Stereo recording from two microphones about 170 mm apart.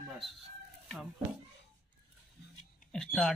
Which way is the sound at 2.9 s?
Centre (ahead or behind).